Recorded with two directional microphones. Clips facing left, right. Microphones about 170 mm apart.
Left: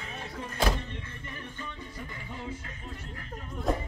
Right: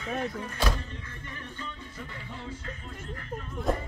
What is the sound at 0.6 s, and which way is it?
Music, 25° left (ahead or behind).